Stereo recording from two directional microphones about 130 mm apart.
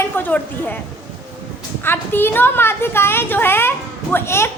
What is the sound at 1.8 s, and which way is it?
A woman's voice, 15° left (ahead or behind).